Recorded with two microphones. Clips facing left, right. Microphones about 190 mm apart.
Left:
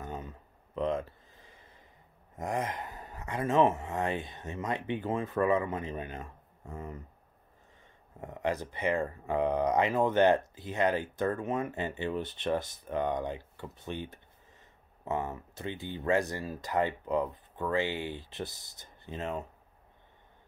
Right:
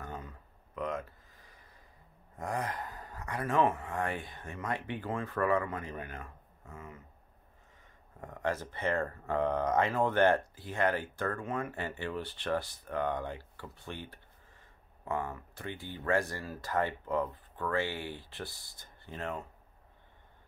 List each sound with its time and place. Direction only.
0.0 s a sound: 20° left (ahead or behind)
2.3 s speech: 20° left (ahead or behind)
8.2 s speech: 20° left (ahead or behind)